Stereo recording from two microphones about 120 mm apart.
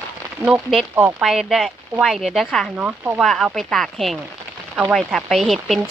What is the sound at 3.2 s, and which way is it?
Speech, centre (ahead or behind).